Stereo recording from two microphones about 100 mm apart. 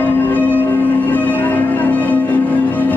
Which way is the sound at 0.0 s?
20° left (ahead or behind).